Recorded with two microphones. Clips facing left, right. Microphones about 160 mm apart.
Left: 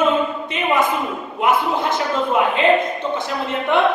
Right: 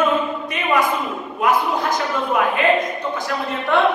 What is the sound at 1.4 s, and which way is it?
A woman's voice, 25° left (ahead or behind).